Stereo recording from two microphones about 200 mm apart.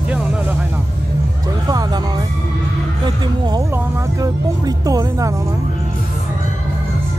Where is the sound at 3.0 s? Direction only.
20° right (ahead or behind).